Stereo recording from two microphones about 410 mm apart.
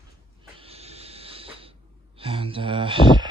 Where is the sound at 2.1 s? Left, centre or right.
Centre.